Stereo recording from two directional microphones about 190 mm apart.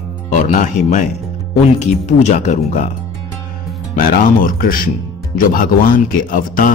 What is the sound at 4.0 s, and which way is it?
Speech, 50° left (ahead or behind).